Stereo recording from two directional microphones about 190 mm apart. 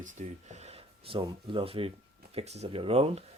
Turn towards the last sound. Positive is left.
turn(degrees=-30)  # may be behind; listen again after turning